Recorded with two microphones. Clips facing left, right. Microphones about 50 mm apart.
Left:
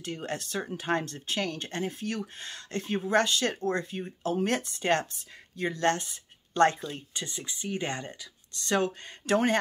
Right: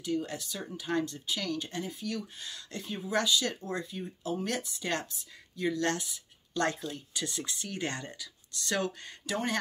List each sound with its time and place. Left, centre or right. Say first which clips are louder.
0.0 s speech: right 1 dB; left
7.2 s speech: left 3 dB; centre
9.2 s speech: left 8 dB; left